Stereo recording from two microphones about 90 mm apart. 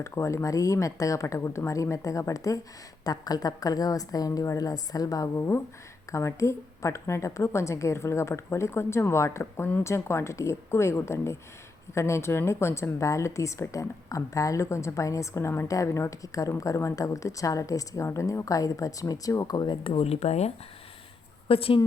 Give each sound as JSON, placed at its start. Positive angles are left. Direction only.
{"t": 0.0, "sound": "a woman's voice", "side_deg": 35}
{"t": 19.8, "sound": "speech", "side_deg": 90}
{"t": 21.4, "sound": "a woman's voice", "side_deg": 90}